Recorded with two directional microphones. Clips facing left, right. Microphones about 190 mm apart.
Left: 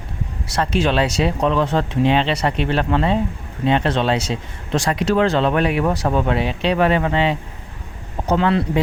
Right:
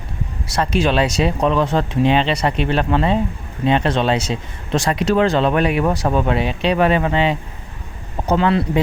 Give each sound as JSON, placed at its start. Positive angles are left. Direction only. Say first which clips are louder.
{"t": 0.4, "sound": "speech", "louder": "right 1 dB", "side_deg": -10}